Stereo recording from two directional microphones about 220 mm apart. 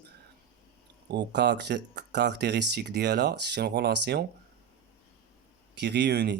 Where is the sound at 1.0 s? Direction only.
50° right (ahead or behind).